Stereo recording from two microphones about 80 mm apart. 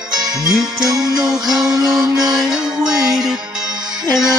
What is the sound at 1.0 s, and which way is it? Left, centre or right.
Music, right.